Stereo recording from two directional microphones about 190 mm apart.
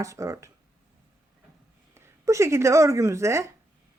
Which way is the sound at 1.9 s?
15° right (ahead or behind).